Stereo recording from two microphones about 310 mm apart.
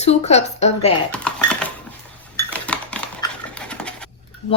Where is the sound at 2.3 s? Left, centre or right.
Centre.